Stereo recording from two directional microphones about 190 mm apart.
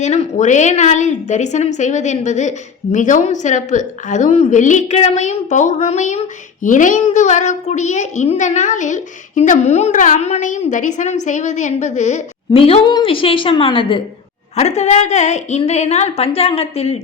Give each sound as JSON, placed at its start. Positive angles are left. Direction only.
{"t": 0.0, "sound": "a woman's voice", "side_deg": 35}